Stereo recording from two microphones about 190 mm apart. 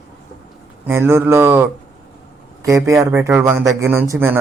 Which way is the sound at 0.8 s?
10° right (ahead or behind).